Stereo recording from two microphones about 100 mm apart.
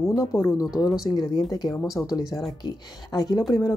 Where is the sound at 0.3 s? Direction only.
35° left (ahead or behind).